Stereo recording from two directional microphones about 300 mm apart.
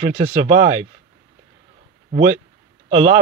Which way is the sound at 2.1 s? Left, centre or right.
Right.